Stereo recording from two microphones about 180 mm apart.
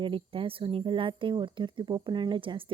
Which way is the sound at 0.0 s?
30° right (ahead or behind).